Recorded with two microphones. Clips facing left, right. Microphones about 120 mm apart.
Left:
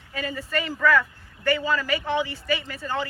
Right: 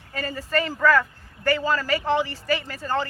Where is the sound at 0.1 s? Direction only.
40° right (ahead or behind).